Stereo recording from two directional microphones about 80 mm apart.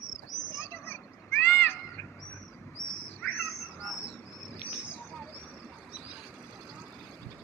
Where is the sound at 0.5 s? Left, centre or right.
Left.